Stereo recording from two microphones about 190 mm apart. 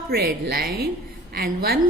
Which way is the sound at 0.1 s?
50° right (ahead or behind).